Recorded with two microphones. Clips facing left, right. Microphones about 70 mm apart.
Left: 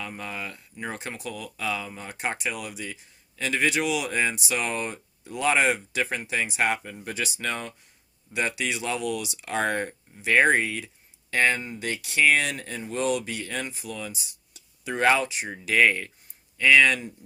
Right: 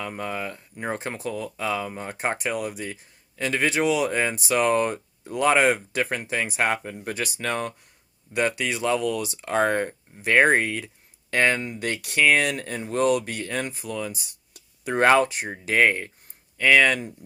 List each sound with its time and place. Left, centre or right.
0.0 s speech: right